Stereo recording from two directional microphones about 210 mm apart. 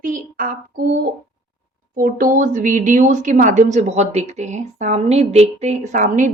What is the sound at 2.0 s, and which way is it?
A woman's voice, 40° right (ahead or behind).